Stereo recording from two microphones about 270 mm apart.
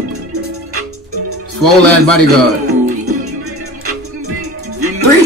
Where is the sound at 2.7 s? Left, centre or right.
Right.